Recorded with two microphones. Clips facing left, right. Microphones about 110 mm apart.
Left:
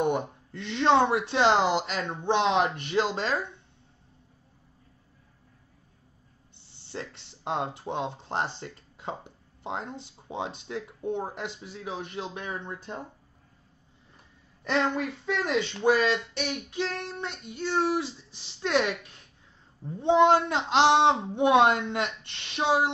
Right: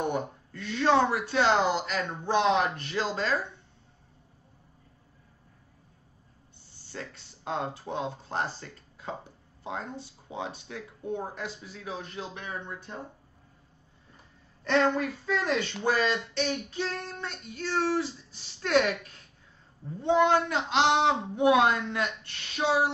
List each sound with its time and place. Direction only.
0.0 s speech: 20° left (ahead or behind)
6.9 s speech: 25° left (ahead or behind)
14.7 s child singing: 10° left (ahead or behind)
20.0 s speech: 20° left (ahead or behind)